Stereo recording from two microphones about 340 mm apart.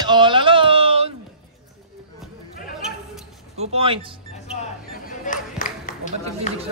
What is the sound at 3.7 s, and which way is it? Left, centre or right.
Speech, centre.